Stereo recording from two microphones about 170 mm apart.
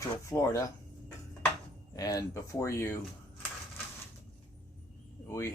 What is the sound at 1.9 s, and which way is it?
Speech, 20° left (ahead or behind).